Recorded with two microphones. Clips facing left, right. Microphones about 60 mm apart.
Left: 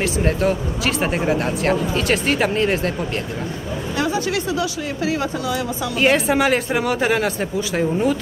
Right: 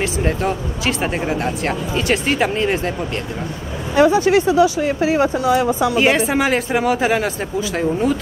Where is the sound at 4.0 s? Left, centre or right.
Right.